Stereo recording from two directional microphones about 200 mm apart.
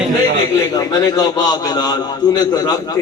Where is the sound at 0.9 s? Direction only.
20° left (ahead or behind).